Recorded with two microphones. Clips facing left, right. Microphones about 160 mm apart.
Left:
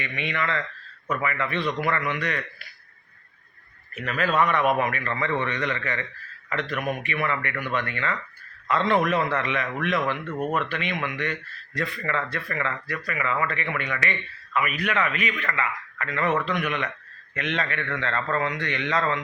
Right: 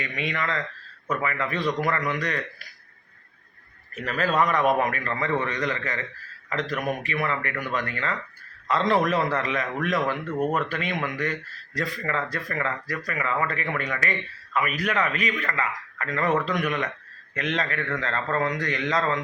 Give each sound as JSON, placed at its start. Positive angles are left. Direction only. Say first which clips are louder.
{"t": 0.0, "sound": "speech", "louder": "even", "side_deg": -40}
{"t": 4.0, "sound": "speech", "louder": "even", "side_deg": -35}